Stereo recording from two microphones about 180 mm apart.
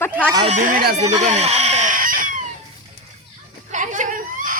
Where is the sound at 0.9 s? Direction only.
40° right (ahead or behind).